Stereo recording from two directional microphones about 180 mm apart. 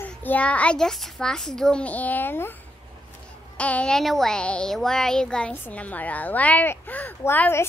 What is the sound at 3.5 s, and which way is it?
A child's voice, 5° left (ahead or behind).